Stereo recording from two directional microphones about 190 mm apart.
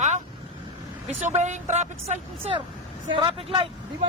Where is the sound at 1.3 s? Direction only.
40° right (ahead or behind).